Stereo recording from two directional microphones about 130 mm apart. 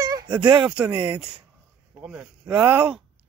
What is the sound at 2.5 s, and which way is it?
Speech, 10° right (ahead or behind).